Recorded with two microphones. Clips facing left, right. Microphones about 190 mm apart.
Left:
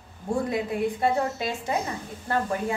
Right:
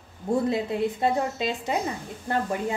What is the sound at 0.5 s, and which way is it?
A woman's voice, 25° right (ahead or behind).